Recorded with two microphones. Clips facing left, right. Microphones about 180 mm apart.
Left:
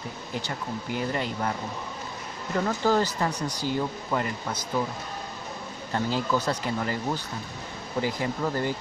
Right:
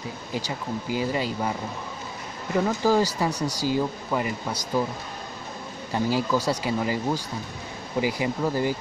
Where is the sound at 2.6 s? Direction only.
10° right (ahead or behind).